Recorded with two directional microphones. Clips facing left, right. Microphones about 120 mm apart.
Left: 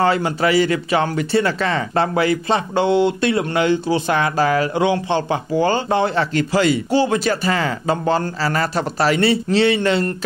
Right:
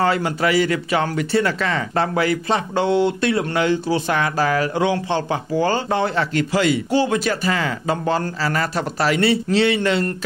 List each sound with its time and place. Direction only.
0.0 s speech: 25° left (ahead or behind)